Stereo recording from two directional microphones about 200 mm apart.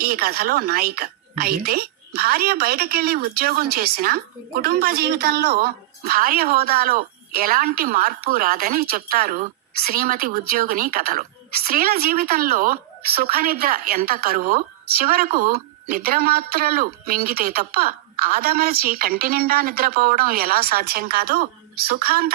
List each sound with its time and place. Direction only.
0.0 s a woman's voice: 50° right (ahead or behind)